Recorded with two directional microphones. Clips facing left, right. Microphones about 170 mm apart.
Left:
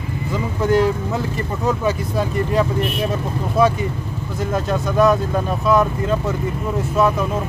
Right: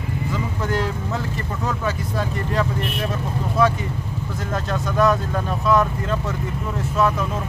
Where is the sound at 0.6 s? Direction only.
15° left (ahead or behind).